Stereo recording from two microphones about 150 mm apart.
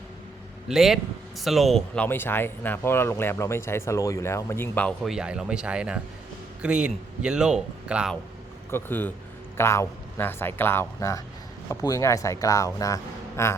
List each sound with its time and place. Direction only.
0.7 s speech: centre (ahead or behind)
2.0 s speech: 15° left (ahead or behind)
5.0 s speech: 5° right (ahead or behind)
8.7 s speech: 15° left (ahead or behind)